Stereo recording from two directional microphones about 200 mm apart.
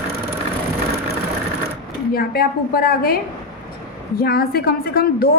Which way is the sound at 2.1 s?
50° left (ahead or behind).